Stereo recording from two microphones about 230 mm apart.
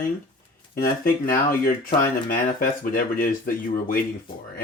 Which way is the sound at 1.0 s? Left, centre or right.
Left.